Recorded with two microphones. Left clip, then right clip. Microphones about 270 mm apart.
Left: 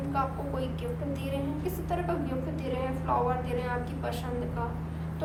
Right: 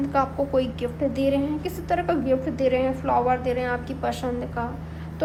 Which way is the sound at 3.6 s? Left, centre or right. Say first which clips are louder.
Right 7 dB; right.